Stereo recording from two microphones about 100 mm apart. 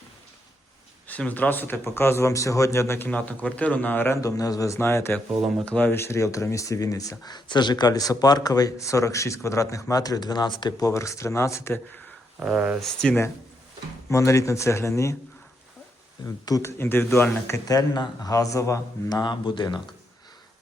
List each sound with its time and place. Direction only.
1.0 s speech: 15° left (ahead or behind)
3.1 s speech: 15° left (ahead or behind)
4.2 s speech: 35° left (ahead or behind)
12.4 s speech: 15° right (ahead or behind)
12.8 s speech: 5° left (ahead or behind)
14.1 s speech: 30° left (ahead or behind)
16.2 s speech: 30° left (ahead or behind)
17.7 s speech: 45° left (ahead or behind)
19.0 s speech: 45° left (ahead or behind)